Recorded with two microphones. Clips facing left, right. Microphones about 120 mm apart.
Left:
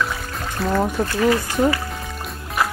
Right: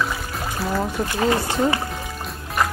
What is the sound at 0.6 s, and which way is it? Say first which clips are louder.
Speech: left 4 dB; centre (ahead or behind).